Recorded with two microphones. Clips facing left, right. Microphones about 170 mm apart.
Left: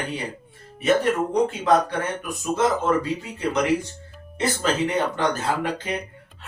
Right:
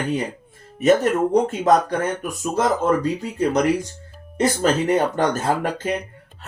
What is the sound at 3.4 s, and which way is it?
Speech, 40° right (ahead or behind).